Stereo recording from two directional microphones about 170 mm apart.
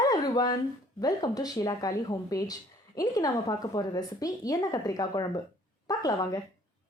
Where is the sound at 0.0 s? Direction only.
20° left (ahead or behind).